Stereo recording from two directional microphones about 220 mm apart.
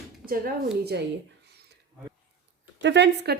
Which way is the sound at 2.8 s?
50° right (ahead or behind).